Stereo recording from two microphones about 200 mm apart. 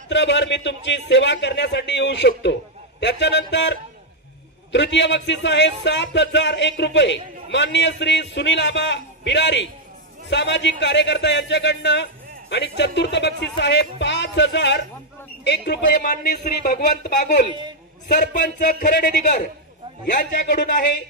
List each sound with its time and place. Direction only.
0.1 s speech: 60° left (ahead or behind)
4.7 s a man's voice: 60° left (ahead or behind)